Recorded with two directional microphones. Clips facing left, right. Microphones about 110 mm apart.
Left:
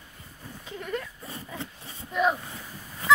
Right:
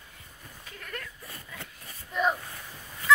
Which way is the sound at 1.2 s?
25° left (ahead or behind).